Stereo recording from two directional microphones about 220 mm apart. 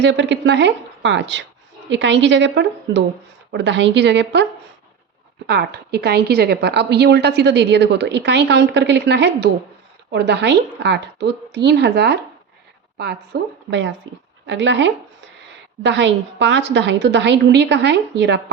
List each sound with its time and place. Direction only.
0.0 s a woman's voice: 55° right (ahead or behind)
5.5 s a woman's voice: 50° right (ahead or behind)
13.7 s a woman's voice: 55° right (ahead or behind)